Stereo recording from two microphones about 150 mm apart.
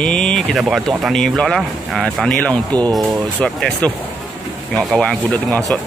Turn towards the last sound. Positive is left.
turn(degrees=10)  # may be behind; listen again after turning